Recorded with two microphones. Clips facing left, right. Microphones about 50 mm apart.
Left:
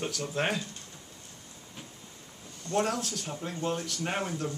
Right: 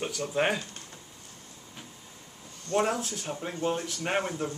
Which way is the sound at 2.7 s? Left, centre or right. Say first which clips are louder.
Right 2 dB; centre.